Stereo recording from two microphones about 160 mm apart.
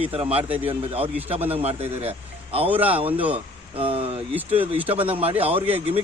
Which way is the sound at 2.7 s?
10° right (ahead or behind).